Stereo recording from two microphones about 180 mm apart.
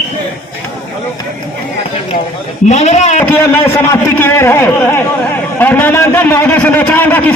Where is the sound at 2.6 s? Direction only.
40° left (ahead or behind).